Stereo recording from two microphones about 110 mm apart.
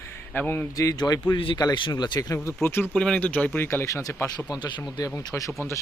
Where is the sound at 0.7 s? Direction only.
30° left (ahead or behind).